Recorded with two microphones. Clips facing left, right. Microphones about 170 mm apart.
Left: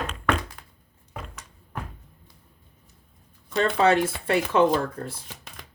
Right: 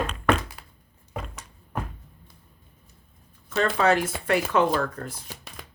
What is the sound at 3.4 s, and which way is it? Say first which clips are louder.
Speech: left 1 dB; 30° left (ahead or behind).